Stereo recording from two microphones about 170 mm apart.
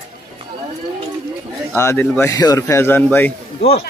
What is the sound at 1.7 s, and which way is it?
Speech, 15° left (ahead or behind).